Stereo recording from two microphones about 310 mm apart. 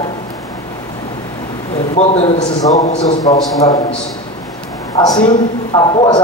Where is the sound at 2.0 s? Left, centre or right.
Left.